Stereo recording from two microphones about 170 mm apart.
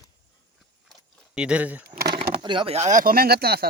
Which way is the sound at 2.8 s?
45° right (ahead or behind).